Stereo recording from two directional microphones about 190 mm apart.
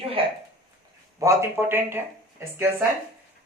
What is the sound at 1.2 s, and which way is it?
Speech, 15° right (ahead or behind).